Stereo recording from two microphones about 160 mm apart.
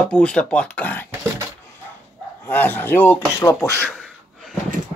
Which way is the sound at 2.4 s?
10° left (ahead or behind).